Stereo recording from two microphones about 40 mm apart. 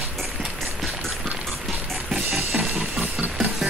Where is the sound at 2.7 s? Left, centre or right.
Right.